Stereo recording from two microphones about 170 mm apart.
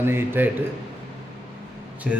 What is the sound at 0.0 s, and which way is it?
Speech, 15° right (ahead or behind).